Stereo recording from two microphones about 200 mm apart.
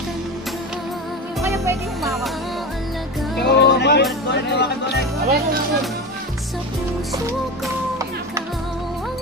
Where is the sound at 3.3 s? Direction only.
55° left (ahead or behind).